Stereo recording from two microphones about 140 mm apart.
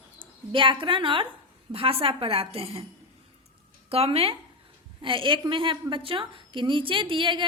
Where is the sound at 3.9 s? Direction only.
45° right (ahead or behind).